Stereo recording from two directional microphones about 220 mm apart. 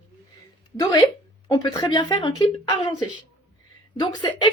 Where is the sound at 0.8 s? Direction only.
15° left (ahead or behind).